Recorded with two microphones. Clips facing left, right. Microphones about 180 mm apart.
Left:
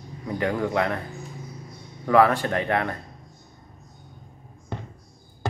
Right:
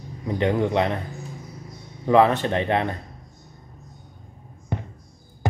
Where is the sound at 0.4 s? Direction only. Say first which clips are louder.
Right 3 dB; 20° right (ahead or behind).